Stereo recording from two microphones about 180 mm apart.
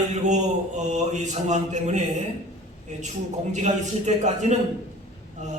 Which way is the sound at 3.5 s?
40° right (ahead or behind).